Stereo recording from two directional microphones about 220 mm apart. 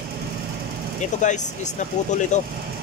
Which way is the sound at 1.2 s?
35° left (ahead or behind).